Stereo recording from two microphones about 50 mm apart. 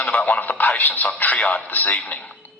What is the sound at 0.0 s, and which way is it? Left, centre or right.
A man's voice, left.